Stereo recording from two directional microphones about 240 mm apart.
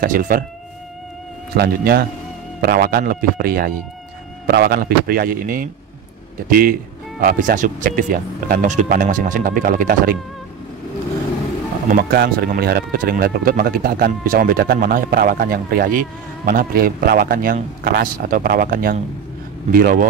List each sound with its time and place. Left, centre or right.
0.0 s speech: right
1.5 s speech: right
11.9 s speech: right